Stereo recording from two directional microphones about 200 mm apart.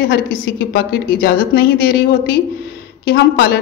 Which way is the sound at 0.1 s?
50° left (ahead or behind).